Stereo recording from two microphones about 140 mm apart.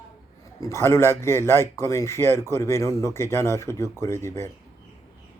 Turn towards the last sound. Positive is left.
turn(degrees=20)  # may be behind; listen again after turning